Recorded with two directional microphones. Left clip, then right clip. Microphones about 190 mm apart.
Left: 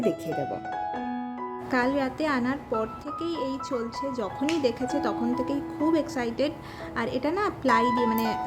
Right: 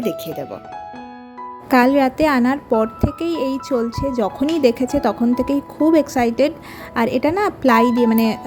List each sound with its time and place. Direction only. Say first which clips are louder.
1.7 s speech: right 12 dB; 40° right (ahead or behind)